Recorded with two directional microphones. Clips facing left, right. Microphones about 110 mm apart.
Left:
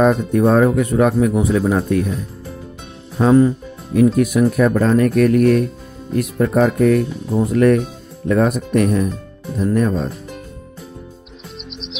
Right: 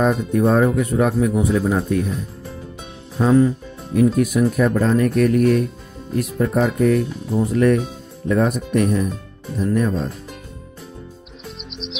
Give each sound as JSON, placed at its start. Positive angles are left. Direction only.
{"t": 0.0, "sound": "speech", "side_deg": 70}
{"t": 3.2, "sound": "speech", "side_deg": 50}
{"t": 3.9, "sound": "speech", "side_deg": 70}